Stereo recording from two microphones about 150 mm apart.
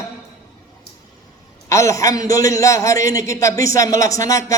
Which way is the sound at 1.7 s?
20° left (ahead or behind).